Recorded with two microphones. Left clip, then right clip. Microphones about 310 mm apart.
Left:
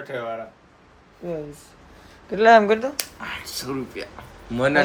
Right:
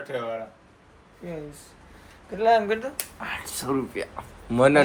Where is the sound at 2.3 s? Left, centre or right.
Left.